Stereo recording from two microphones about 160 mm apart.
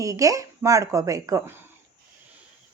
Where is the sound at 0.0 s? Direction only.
20° right (ahead or behind).